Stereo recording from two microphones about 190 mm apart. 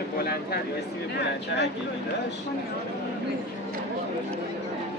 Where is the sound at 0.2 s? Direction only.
55° left (ahead or behind).